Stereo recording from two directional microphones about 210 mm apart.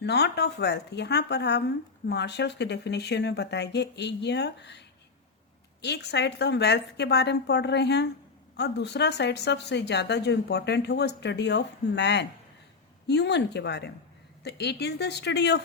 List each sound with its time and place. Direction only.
0.0 s speech: 50° left (ahead or behind)